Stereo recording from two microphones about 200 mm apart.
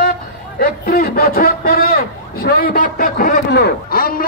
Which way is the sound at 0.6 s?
45° left (ahead or behind).